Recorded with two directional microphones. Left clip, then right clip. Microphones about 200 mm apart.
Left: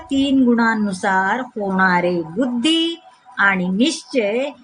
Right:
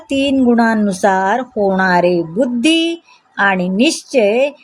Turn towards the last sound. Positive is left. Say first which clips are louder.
# right 7 dB
turn(degrees=-30)  # may be behind; listen again after turning